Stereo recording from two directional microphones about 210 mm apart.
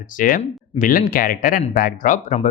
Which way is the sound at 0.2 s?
40° left (ahead or behind).